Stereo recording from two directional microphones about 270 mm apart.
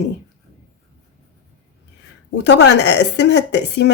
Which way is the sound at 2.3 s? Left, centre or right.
Left.